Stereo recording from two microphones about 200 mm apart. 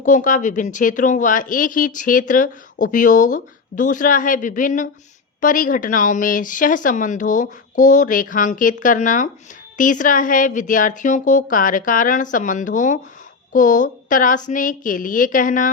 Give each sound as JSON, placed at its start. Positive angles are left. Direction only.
{"t": 0.0, "sound": "speech", "side_deg": 40}